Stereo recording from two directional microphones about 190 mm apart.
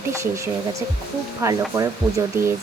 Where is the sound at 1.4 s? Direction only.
15° right (ahead or behind).